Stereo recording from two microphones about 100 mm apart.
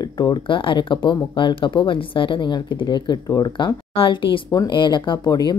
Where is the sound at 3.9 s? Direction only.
60° left (ahead or behind); by 5.5 s 45° left (ahead or behind).